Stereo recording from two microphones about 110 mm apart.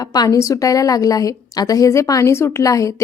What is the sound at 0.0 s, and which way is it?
A woman's voice, 35° left (ahead or behind).